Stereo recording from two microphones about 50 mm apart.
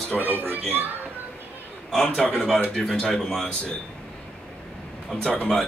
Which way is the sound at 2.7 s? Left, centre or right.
Centre.